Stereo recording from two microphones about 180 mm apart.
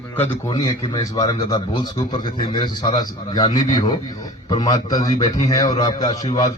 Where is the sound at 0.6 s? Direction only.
20° left (ahead or behind).